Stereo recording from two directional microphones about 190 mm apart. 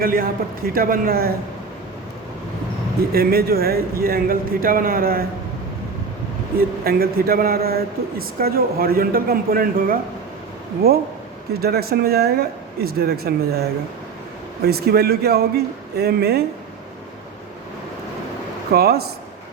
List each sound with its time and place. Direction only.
0.0 s speech: 50° right (ahead or behind)
3.1 s speech: 55° right (ahead or behind)
6.6 s speech: 55° right (ahead or behind)
11.6 s speech: 55° right (ahead or behind)
14.6 s speech: 55° right (ahead or behind)
18.7 s speech: 55° right (ahead or behind)